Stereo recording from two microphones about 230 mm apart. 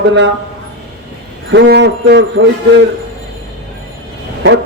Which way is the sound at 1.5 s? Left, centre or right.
Right.